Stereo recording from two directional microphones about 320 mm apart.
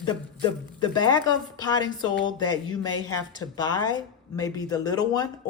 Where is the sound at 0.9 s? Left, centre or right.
Centre.